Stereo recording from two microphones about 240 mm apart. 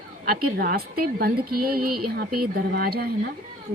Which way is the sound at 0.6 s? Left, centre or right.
Right.